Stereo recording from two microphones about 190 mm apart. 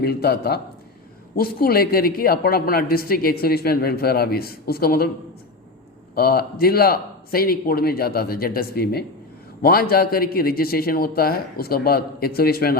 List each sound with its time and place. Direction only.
0.0 s a man's voice: 55° left (ahead or behind)
6.1 s a woman's voice: 55° left (ahead or behind)